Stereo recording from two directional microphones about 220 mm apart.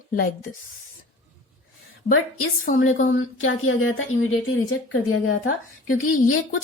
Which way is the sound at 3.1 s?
65° left (ahead or behind).